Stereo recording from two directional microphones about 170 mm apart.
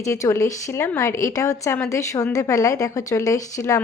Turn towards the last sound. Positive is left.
turn(degrees=20)  # may be behind; listen again after turning